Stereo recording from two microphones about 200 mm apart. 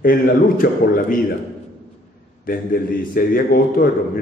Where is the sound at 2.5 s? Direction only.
45° left (ahead or behind).